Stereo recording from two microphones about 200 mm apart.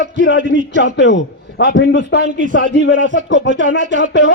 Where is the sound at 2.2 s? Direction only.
40° right (ahead or behind).